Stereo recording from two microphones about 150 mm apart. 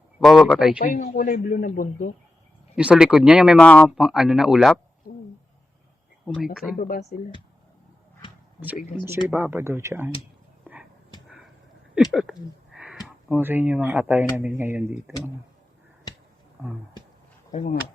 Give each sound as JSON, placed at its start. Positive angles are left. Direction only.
{"t": 0.2, "sound": "speech", "side_deg": 0}
{"t": 0.9, "sound": "speech", "side_deg": 60}
{"t": 2.7, "sound": "speech", "side_deg": -5}
{"t": 3.6, "sound": "speech", "side_deg": 10}
{"t": 3.8, "sound": "speech", "side_deg": -5}
{"t": 6.2, "sound": "speech", "side_deg": 0}
{"t": 6.7, "sound": "speech", "side_deg": 70}
{"t": 9.2, "sound": "speech", "side_deg": -15}
{"t": 10.6, "sound": "a sound", "side_deg": -10}
{"t": 11.9, "sound": "speech", "side_deg": -5}
{"t": 16.6, "sound": "speech", "side_deg": -10}
{"t": 17.5, "sound": "speech", "side_deg": 60}